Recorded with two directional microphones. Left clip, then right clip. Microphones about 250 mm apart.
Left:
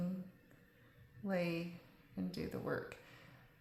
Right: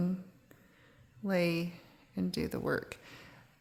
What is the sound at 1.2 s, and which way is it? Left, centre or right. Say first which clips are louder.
A woman's voice: right 7 dB; right.